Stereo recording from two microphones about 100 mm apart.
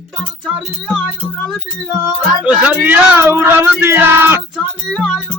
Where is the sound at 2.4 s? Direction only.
15° right (ahead or behind).